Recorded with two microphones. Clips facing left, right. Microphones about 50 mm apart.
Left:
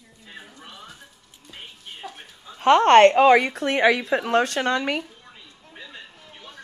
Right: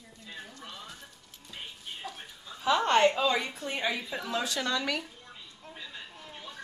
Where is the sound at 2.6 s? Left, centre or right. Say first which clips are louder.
Left 11 dB; left.